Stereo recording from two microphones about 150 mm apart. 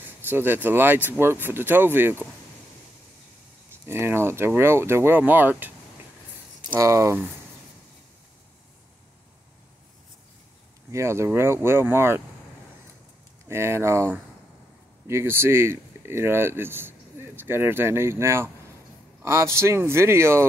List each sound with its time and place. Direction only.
0.0 s speech: 15° right (ahead or behind)
3.8 s speech: 15° right (ahead or behind)
6.7 s speech: 20° right (ahead or behind)
10.9 s speech: 20° right (ahead or behind)
13.5 s speech: 15° right (ahead or behind)